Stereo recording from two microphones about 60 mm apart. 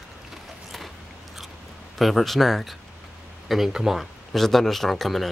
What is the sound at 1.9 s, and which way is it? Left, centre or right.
Speech, centre.